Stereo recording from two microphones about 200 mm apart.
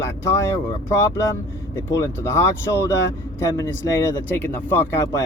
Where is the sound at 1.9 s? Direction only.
15° left (ahead or behind).